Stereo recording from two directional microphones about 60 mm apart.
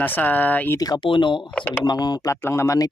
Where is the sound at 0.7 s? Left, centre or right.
Left.